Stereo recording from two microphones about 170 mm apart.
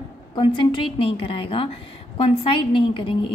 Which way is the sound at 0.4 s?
30° left (ahead or behind).